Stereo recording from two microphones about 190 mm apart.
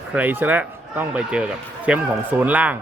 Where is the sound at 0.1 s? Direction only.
10° right (ahead or behind).